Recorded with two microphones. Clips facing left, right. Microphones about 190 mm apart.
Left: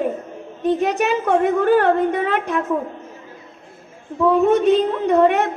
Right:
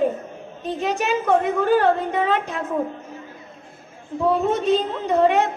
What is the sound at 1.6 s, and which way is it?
Speech, 60° left (ahead or behind).